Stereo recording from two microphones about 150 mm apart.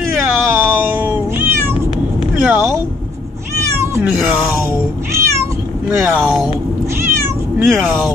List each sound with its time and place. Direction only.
0.5 s cat: 15° right (ahead or behind)
2.4 s a sound: 10° right (ahead or behind)
3.8 s cat: 20° right (ahead or behind)
4.3 s a sound: 10° right (ahead or behind)
5.9 s speech: 10° right (ahead or behind)
7.0 s cat: 15° right (ahead or behind)
7.6 s speech: centre (ahead or behind)